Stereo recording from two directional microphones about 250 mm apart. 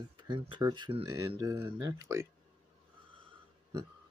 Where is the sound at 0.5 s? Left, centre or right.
Centre.